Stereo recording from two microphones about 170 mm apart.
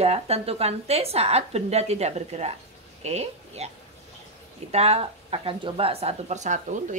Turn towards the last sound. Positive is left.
turn(degrees=-45)  # may be behind; listen again after turning